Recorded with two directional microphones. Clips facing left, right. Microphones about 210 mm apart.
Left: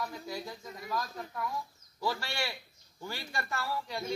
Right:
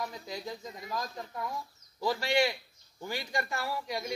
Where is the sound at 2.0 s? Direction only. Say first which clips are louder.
Right 7 dB; 15° right (ahead or behind).